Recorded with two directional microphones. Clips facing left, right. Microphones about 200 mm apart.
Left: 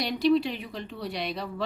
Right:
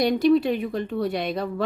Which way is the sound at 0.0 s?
50° right (ahead or behind).